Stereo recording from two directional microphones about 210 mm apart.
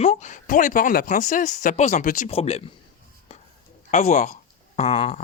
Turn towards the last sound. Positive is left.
turn(degrees=30)  # may be behind; listen again after turning